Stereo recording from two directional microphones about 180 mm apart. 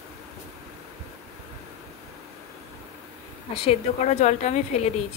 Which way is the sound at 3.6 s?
40° left (ahead or behind).